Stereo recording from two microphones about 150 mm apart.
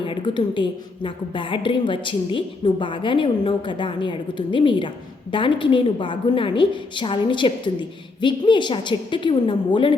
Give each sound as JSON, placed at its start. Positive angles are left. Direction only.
{"t": 0.0, "sound": "a woman's voice", "side_deg": 35}